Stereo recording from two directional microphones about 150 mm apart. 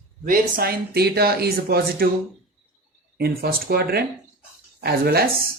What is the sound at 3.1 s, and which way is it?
Speech, 90° right.